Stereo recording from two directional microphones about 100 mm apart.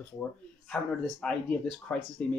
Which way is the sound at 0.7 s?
10° left (ahead or behind).